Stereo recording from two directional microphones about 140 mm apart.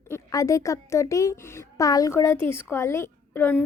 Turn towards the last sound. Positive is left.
turn(degrees=15)  # may be behind; listen again after turning